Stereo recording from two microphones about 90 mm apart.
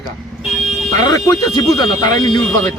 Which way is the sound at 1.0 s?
45° left (ahead or behind).